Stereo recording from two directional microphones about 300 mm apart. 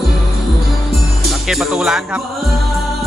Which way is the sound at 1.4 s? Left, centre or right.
Centre.